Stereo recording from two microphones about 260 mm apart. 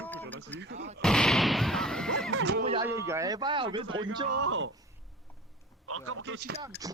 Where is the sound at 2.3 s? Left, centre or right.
Right.